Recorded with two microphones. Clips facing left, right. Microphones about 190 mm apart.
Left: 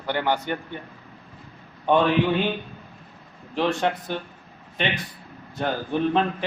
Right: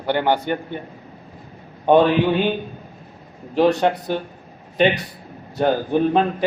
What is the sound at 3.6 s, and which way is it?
A man's voice, 40° right (ahead or behind).